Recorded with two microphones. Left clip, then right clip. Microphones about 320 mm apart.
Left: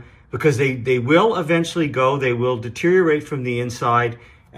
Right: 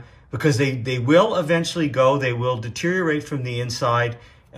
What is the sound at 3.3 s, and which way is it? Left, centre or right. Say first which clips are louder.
Speech: left 3 dB; right.